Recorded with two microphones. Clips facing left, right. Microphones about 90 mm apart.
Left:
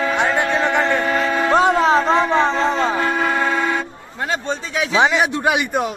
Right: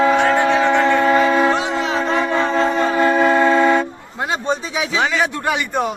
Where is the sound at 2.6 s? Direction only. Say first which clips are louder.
Right 1 dB; 25° left (ahead or behind).